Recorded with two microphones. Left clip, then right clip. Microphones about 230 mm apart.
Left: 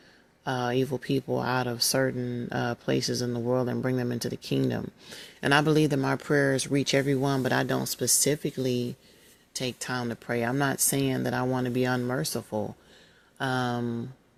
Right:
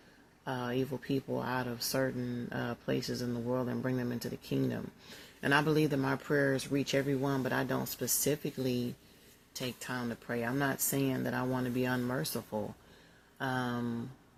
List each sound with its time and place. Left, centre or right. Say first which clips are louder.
0.4 s speech: left 8 dB; left